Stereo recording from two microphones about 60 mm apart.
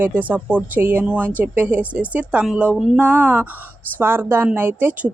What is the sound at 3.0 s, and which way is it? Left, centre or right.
Speech, right.